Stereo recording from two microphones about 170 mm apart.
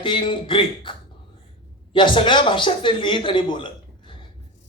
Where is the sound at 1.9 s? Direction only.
30° left (ahead or behind).